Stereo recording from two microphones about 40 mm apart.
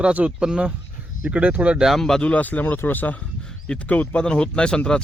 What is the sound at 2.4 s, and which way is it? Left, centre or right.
Speech, left.